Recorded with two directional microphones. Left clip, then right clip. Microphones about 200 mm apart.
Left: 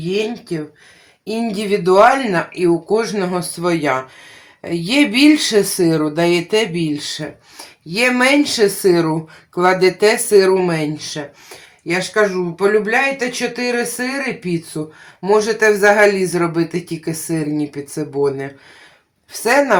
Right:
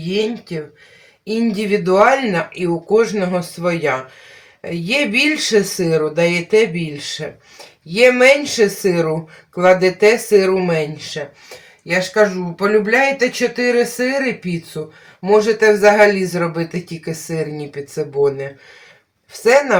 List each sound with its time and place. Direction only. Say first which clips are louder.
0.1 s speech: even; 30° left (ahead or behind)